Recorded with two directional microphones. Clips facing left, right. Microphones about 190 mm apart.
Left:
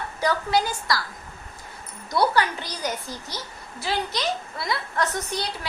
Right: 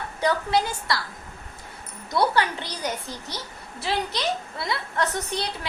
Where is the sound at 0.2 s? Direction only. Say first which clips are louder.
Even; 25° right (ahead or behind).